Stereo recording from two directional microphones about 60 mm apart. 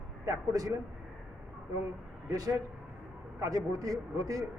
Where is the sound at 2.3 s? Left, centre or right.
Right.